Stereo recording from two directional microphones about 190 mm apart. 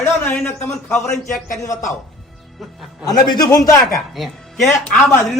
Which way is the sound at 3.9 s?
Centre (ahead or behind).